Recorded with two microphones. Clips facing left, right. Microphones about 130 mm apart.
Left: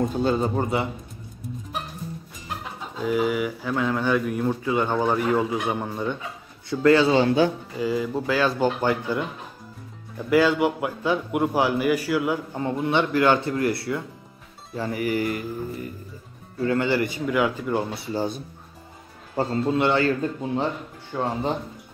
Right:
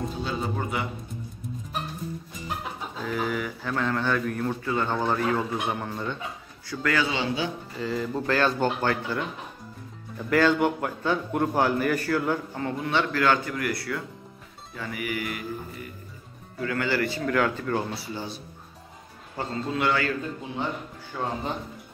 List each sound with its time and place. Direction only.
0.2 s speech: 45° left (ahead or behind)
3.0 s a man's voice: 10° left (ahead or behind)
6.7 s speech: 25° left (ahead or behind)
7.1 s speech: 45° left (ahead or behind)
7.8 s a man's voice: 10° left (ahead or behind)
10.3 s a man's voice: 5° left (ahead or behind)
12.5 s speech: 20° left (ahead or behind); by 15.9 s 35° left (ahead or behind)
16.6 s speech: 25° left (ahead or behind)
18.1 s speech: 45° left (ahead or behind); by 21.5 s 25° left (ahead or behind)